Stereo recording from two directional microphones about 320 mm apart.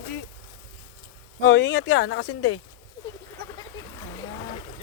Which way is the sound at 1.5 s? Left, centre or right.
Left.